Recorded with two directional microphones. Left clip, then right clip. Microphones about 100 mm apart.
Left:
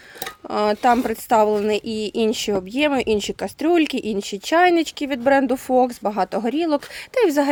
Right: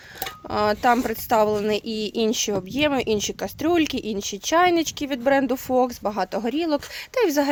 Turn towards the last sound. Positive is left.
turn(degrees=35)  # may be behind; listen again after turning